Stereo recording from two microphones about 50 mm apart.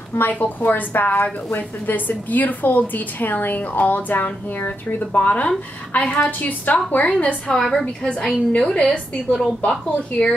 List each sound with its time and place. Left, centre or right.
0.3 s a woman's voice: left
7.5 s a woman's voice: centre
8.5 s a woman's voice: left